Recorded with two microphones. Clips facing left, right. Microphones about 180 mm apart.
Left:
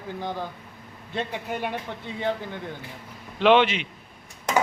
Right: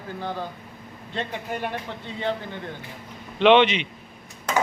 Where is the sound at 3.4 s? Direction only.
5° left (ahead or behind).